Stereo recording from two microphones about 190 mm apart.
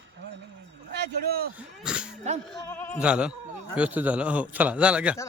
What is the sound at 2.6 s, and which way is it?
Bleat, 10° left (ahead or behind).